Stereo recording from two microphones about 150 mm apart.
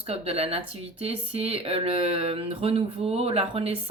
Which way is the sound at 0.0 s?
40° right (ahead or behind).